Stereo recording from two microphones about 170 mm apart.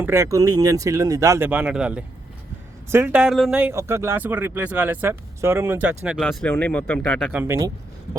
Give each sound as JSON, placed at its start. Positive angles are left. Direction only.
{"t": 0.0, "sound": "speech", "side_deg": -15}
{"t": 3.6, "sound": "speech", "side_deg": -15}
{"t": 6.1, "sound": "speech", "side_deg": 0}
{"t": 7.3, "sound": "speech", "side_deg": -15}